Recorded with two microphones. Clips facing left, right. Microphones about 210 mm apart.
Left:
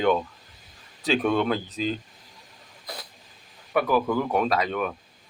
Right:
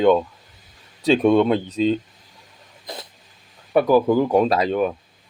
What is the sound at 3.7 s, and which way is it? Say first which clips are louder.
Speech: right 7 dB; 30° right (ahead or behind).